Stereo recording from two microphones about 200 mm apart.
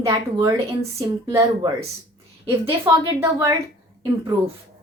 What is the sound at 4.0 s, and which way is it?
Speech, 20° right (ahead or behind).